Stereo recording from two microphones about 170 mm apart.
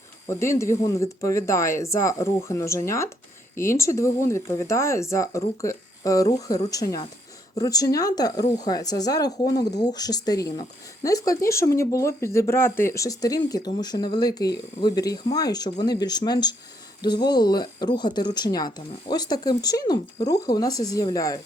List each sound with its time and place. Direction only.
0.3 s speech: 15° left (ahead or behind)